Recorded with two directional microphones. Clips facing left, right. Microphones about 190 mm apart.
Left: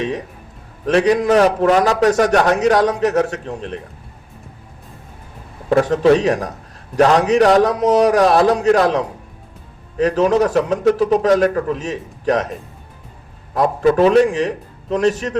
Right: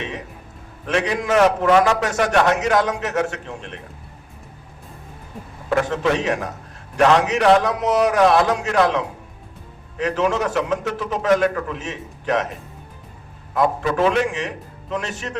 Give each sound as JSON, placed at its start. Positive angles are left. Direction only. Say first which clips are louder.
{"t": 0.9, "sound": "a man's voice", "louder": "left 7 dB", "side_deg": 35}
{"t": 5.6, "sound": "a man's voice", "louder": "left 7 dB", "side_deg": 35}